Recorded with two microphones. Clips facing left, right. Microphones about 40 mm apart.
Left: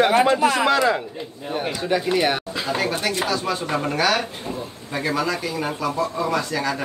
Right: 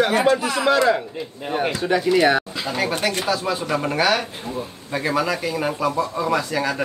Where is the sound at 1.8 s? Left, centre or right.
Right.